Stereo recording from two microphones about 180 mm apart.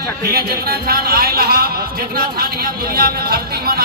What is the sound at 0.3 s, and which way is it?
A man's voice, 55° right (ahead or behind).